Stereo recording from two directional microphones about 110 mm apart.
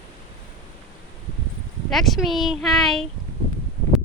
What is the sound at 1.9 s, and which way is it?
Speech, centre (ahead or behind).